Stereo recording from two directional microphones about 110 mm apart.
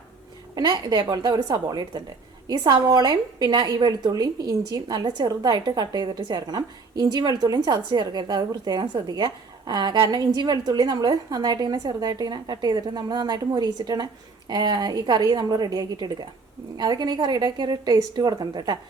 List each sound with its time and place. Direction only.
0.5 s a woman's voice: 40° right (ahead or behind)